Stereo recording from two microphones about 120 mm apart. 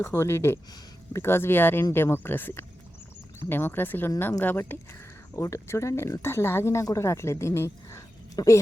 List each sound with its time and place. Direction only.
0.0 s speech: 20° left (ahead or behind)